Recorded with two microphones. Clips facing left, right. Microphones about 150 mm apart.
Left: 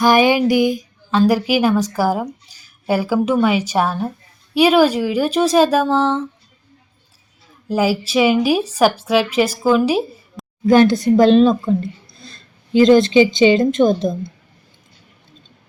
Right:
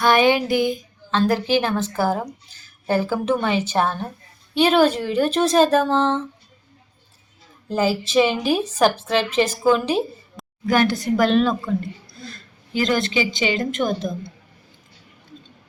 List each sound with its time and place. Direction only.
0.0 s a woman's voice: 15° left (ahead or behind)
7.7 s a woman's voice: 10° left (ahead or behind)
10.7 s a woman's voice: 20° left (ahead or behind)
12.7 s a woman's voice: 20° left (ahead or behind)